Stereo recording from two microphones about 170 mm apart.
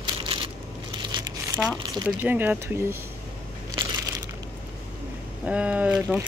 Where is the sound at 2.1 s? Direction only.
10° right (ahead or behind).